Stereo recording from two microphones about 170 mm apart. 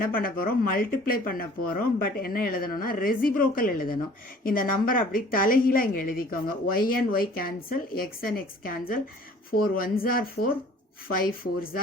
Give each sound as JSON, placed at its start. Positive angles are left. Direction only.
{"t": 0.0, "sound": "a woman's voice", "side_deg": 55}